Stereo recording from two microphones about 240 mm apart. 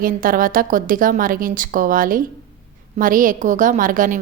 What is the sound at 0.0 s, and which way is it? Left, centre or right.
A woman's voice, right.